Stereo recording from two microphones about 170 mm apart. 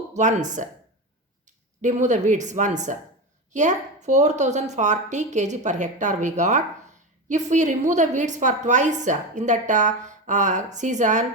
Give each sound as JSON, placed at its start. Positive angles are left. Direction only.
{"t": 0.1, "sound": "a woman's voice", "side_deg": -45}